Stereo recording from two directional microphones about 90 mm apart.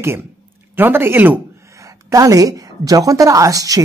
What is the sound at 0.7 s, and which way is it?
Speech, 25° right (ahead or behind).